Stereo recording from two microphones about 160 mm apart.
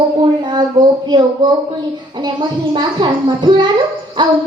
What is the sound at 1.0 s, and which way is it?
Speech, 30° right (ahead or behind).